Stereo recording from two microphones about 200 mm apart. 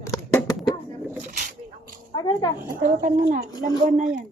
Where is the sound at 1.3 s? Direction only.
45° right (ahead or behind).